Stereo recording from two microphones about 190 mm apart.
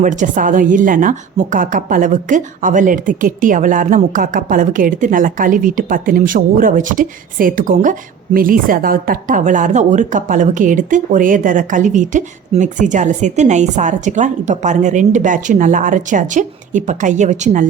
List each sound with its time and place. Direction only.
0.0 s a woman's voice: 40° right (ahead or behind)